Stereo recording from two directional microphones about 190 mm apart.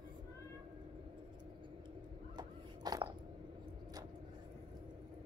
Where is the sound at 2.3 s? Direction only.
20° right (ahead or behind).